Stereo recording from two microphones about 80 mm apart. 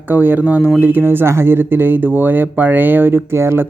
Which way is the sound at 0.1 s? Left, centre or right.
Right.